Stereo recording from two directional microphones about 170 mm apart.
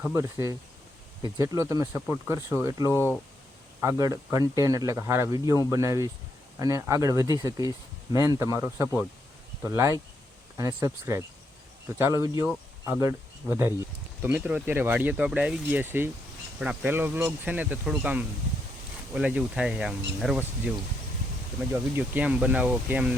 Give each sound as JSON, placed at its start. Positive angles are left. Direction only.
{"t": 0.0, "sound": "speech", "side_deg": -15}
{"t": 21.9, "sound": "speech", "side_deg": -10}